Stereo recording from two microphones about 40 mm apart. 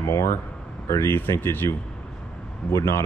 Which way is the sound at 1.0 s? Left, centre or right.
Left.